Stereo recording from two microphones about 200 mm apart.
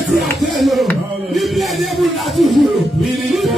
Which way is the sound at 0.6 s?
Centre (ahead or behind).